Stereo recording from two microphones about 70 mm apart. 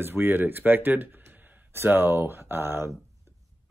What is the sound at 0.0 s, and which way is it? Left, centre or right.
Speech, right.